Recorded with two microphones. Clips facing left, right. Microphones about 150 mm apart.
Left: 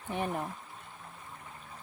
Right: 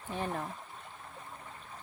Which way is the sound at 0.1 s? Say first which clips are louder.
Left 2 dB; 15° left (ahead or behind).